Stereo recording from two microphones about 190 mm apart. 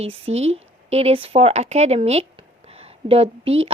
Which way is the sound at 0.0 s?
35° right (ahead or behind).